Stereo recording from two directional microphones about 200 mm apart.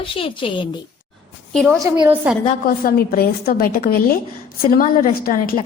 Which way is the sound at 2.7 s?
45° left (ahead or behind).